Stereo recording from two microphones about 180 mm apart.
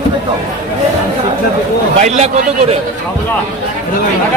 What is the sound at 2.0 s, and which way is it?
Speech, 35° right (ahead or behind).